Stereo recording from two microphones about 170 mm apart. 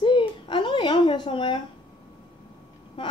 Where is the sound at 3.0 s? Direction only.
30° left (ahead or behind).